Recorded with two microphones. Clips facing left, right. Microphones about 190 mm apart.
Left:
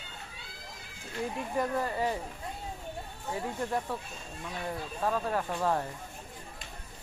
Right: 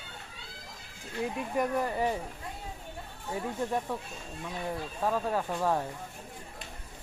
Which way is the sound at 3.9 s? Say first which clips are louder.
Right 1 dB; 15° right (ahead or behind).